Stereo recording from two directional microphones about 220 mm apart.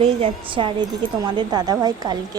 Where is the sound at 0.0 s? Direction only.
25° right (ahead or behind).